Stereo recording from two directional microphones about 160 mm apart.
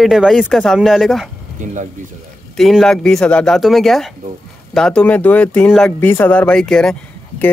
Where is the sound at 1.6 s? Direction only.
50° right (ahead or behind).